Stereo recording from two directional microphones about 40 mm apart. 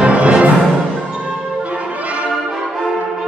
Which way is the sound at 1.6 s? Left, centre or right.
Right.